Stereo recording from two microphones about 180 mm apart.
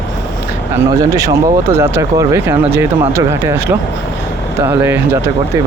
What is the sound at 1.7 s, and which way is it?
Speech, 15° right (ahead or behind).